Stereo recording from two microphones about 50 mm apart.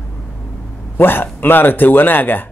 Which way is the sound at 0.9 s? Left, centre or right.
Left.